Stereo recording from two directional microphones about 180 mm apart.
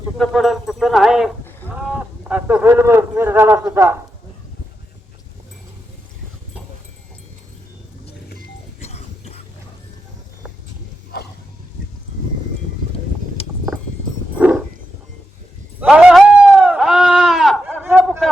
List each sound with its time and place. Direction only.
0.2 s a man's voice: centre (ahead or behind)
8.8 s music: 35° left (ahead or behind)
14.3 s a sound: 5° right (ahead or behind)
15.8 s sheep: 5° right (ahead or behind)